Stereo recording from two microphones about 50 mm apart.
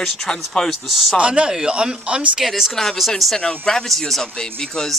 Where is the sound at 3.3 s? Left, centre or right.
Centre.